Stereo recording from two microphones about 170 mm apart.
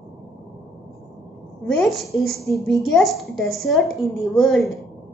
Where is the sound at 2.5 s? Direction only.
Centre (ahead or behind).